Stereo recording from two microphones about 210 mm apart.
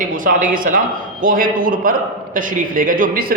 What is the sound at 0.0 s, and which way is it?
A man's voice, 40° right (ahead or behind).